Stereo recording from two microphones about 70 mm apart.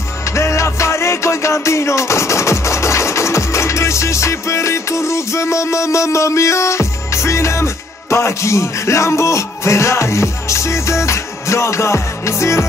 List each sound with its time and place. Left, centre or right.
0.4 s music: left